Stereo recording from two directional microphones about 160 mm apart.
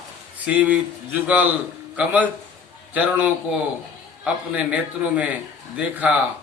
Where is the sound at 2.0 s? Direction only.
10° right (ahead or behind).